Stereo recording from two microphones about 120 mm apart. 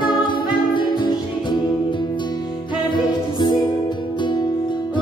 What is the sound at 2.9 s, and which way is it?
Music, 35° left (ahead or behind).